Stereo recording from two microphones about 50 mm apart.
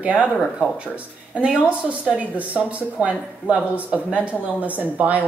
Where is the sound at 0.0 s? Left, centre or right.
Right.